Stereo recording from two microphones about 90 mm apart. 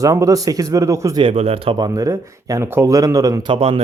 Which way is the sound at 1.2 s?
90° right.